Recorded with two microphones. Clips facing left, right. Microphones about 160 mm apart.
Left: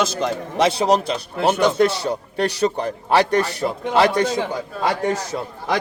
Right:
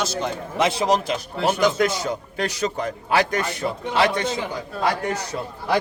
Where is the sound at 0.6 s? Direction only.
35° left (ahead or behind).